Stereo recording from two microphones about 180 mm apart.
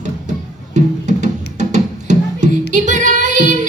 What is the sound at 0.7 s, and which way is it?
Music, 40° right (ahead or behind).